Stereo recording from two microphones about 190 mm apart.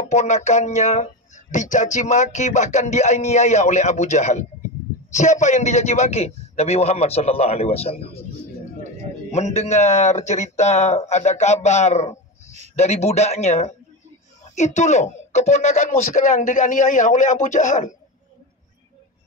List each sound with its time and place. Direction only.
0.1 s speech: 35° left (ahead or behind)
9.3 s a man's voice: 35° left (ahead or behind)